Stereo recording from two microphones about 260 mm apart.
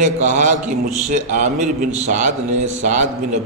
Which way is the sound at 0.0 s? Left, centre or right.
Right.